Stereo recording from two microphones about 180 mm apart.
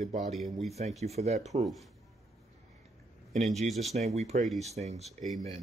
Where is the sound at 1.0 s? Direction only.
35° right (ahead or behind).